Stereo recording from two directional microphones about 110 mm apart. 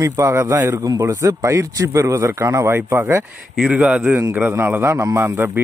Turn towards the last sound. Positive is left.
turn(degrees=-20)  # may be behind; listen again after turning